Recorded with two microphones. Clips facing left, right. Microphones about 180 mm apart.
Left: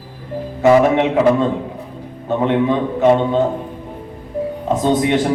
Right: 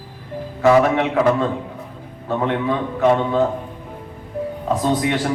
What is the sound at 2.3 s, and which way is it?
A man's voice, 20° left (ahead or behind).